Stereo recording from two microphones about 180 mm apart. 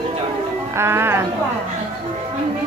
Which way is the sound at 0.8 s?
15° right (ahead or behind).